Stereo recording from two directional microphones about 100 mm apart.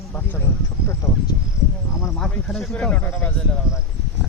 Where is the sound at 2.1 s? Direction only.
10° left (ahead or behind).